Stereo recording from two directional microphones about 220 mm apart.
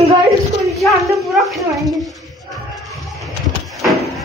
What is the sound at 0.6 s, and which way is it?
Speech, centre (ahead or behind).